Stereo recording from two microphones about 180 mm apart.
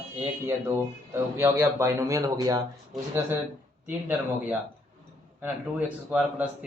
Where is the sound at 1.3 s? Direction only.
15° right (ahead or behind).